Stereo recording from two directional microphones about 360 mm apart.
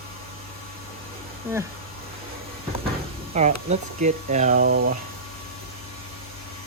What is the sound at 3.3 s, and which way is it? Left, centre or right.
Speech, centre.